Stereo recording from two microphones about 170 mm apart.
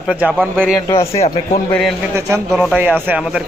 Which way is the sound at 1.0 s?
35° left (ahead or behind).